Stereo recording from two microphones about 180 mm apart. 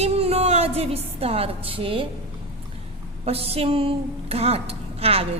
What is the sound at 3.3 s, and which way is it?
A woman's voice, 35° right (ahead or behind).